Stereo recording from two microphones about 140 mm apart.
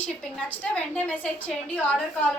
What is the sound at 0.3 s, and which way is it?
A woman's voice, 10° left (ahead or behind).